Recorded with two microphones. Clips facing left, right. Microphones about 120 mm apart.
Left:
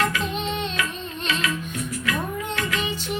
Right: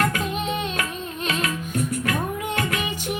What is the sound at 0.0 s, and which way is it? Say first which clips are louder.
Music: right 1 dB; 50° right (ahead or behind).